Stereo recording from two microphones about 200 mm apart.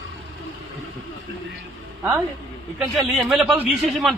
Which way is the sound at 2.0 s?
5° right (ahead or behind).